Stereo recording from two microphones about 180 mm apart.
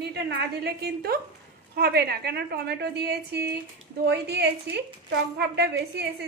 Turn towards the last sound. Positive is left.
turn(degrees=-65)  # may be behind; listen again after turning